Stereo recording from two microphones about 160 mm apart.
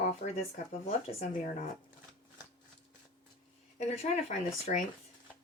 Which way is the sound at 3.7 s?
45° left (ahead or behind).